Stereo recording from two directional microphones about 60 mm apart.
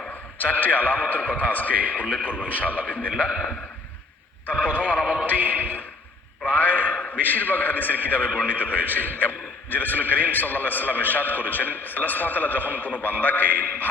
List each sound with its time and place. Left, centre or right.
0.1 s a man's voice: left
4.4 s a man's voice: left